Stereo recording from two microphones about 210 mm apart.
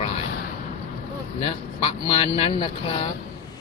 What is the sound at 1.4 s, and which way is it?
Speech, 25° left (ahead or behind).